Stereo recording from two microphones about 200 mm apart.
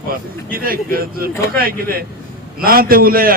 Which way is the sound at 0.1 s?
45° right (ahead or behind).